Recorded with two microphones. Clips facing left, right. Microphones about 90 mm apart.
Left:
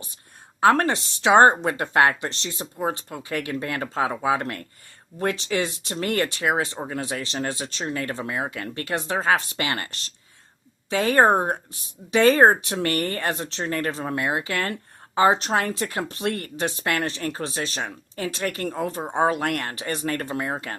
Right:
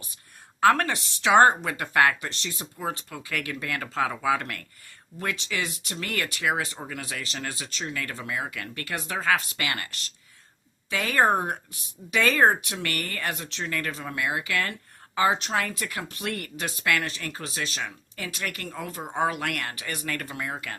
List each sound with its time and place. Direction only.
0.6 s speech: 30° left (ahead or behind)